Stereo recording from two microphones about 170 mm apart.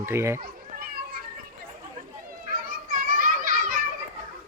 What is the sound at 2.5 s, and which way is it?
Children playing, 55° right (ahead or behind).